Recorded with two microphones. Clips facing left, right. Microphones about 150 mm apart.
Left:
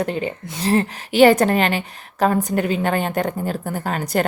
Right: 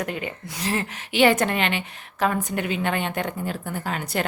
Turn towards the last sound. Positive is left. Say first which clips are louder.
# left 5 dB
turn(degrees=40)  # may be behind; listen again after turning